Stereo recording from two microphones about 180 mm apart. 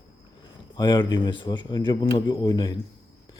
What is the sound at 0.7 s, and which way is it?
Speech, 25° left (ahead or behind).